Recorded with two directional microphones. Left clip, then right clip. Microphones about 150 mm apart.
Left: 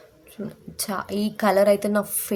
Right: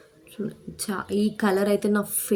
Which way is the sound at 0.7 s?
30° left (ahead or behind).